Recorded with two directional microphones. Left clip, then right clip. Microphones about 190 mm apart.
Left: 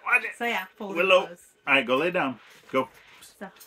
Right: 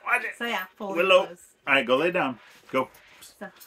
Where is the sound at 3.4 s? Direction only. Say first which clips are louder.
Right 1 dB; 15° left (ahead or behind).